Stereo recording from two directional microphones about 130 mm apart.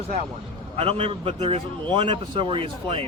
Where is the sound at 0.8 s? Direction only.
50° right (ahead or behind).